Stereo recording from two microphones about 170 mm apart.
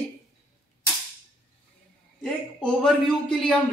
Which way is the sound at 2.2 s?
5° left (ahead or behind).